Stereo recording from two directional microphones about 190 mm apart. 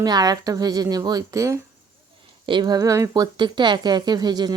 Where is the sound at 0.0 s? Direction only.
20° right (ahead or behind).